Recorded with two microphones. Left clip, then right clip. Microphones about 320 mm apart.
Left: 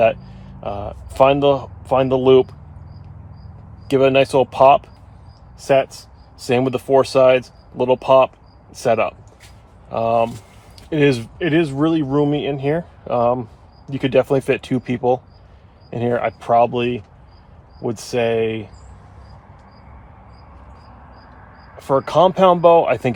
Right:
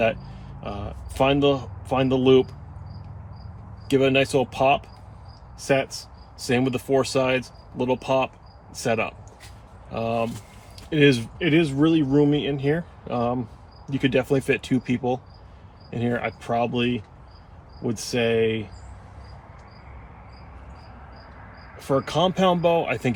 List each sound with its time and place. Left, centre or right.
0.0 s speech: centre
3.8 s speech: centre
21.8 s speech: centre